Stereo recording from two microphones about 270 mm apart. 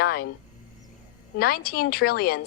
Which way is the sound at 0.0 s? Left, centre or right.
Left.